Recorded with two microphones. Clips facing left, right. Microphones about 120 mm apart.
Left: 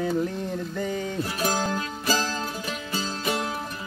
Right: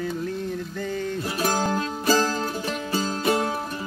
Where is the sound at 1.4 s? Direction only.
45° right (ahead or behind).